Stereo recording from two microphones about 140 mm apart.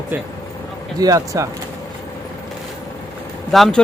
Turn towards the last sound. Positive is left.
turn(degrees=0)  # may be behind; listen again after turning